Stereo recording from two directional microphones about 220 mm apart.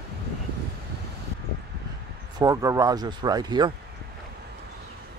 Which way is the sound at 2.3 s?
15° right (ahead or behind).